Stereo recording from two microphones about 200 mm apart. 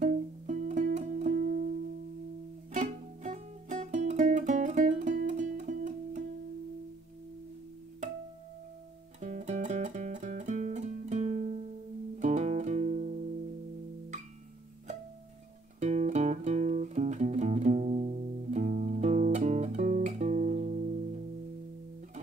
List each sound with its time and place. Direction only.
0.0 s music: 35° right (ahead or behind)
2.7 s music: 35° right (ahead or behind)
9.2 s music: 35° right (ahead or behind)
15.8 s music: 35° right (ahead or behind)